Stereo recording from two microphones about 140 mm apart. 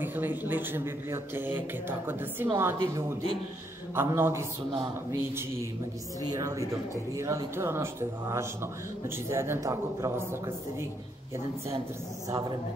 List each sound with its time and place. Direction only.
0.0 s speech: 15° right (ahead or behind)
12.3 s speech: 30° right (ahead or behind)